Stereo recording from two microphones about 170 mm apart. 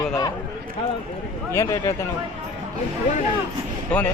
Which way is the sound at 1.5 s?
15° left (ahead or behind).